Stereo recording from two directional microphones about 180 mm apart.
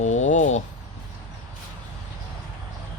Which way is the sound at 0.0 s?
40° left (ahead or behind).